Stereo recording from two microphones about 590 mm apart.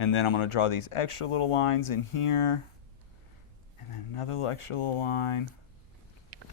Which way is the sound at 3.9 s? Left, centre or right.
Left.